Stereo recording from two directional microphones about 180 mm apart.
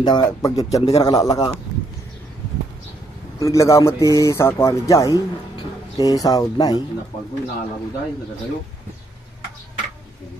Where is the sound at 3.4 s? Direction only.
15° left (ahead or behind).